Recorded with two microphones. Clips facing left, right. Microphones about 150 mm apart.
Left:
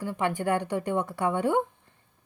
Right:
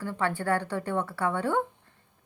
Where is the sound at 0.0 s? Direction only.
15° left (ahead or behind).